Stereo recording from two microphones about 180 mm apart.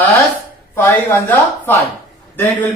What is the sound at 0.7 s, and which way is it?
Speech, 10° left (ahead or behind).